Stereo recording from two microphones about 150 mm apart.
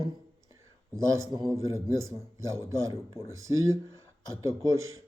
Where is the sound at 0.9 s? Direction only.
20° right (ahead or behind).